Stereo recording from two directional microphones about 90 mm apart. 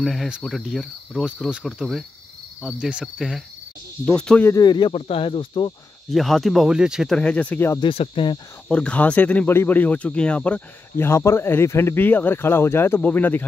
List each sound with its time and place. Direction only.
0.0 s cricket: centre (ahead or behind)
4.1 s speech: 10° left (ahead or behind)
4.6 s speech: 55° left (ahead or behind)
6.0 s cricket: 5° left (ahead or behind)
7.1 s speech: 10° left (ahead or behind)
7.8 s speech: 85° left
8.6 s speech: 10° left (ahead or behind)
11.0 s speech: 30° left (ahead or behind)